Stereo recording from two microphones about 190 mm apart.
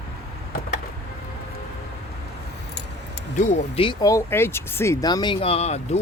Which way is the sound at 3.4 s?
35° left (ahead or behind).